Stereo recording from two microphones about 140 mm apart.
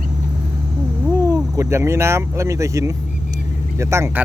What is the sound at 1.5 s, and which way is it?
Speech, 20° right (ahead or behind).